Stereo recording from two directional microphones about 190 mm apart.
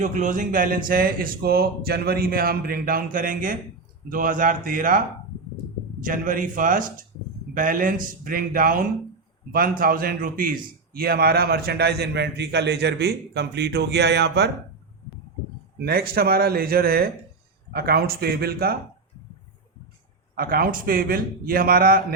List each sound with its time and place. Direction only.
0.0 s a man's voice: 40° right (ahead or behind)
6.1 s a man's voice: 45° right (ahead or behind)
15.8 s a man's voice: 55° right (ahead or behind)
20.3 s a man's voice: 50° right (ahead or behind)